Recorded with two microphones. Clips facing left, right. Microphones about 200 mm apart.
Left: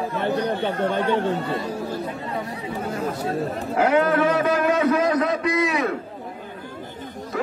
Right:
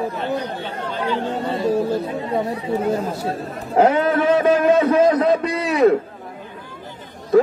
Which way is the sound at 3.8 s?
25° right (ahead or behind).